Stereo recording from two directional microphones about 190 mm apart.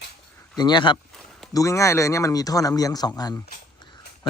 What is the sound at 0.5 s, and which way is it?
Speech, 20° left (ahead or behind).